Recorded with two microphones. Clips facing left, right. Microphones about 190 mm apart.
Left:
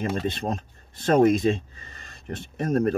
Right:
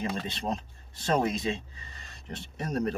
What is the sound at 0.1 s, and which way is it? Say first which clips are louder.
Speech: left 5 dB; 50° left (ahead or behind).